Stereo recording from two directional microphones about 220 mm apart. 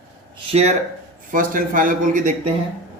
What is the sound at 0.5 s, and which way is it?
A man's voice, 30° right (ahead or behind).